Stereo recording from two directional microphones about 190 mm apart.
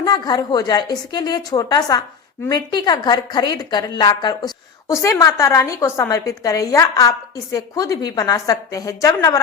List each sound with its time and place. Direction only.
0.0 s a woman's voice: 20° left (ahead or behind)